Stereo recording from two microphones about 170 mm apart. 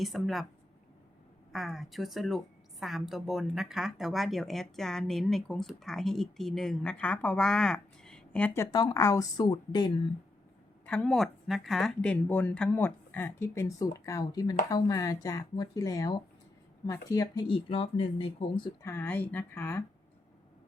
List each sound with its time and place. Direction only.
0.0 s speech: centre (ahead or behind)
1.5 s speech: centre (ahead or behind)
8.7 s speech: 20° left (ahead or behind)
10.8 s speech: 5° left (ahead or behind); by 18.7 s 30° left (ahead or behind)
18.8 s speech: 15° left (ahead or behind)